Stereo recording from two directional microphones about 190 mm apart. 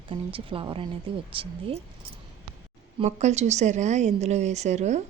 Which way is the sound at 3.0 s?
35° right (ahead or behind).